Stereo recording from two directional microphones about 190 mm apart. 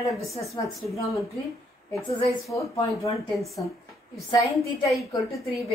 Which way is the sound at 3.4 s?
Centre (ahead or behind).